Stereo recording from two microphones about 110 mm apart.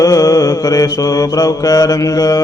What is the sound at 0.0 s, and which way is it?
Mantra, 30° left (ahead or behind).